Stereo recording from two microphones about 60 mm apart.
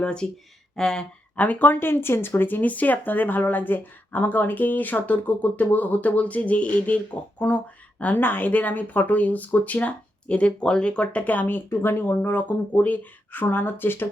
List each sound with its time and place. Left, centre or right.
0.0 s speech: centre
1.4 s speech: left